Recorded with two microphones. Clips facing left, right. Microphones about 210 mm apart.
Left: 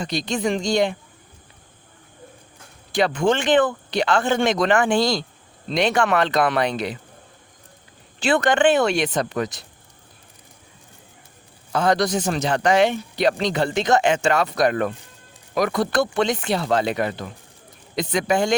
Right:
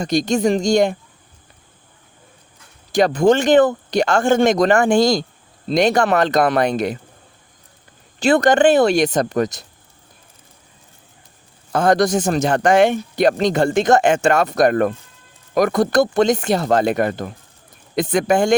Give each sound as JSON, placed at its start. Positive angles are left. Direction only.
{"t": 0.0, "sound": "speech", "side_deg": -45}
{"t": 2.9, "sound": "speech", "side_deg": -40}
{"t": 8.2, "sound": "speech", "side_deg": -40}
{"t": 11.7, "sound": "speech", "side_deg": -50}